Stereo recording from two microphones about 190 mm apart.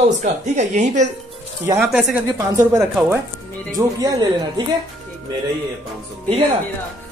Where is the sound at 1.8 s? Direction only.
Centre (ahead or behind).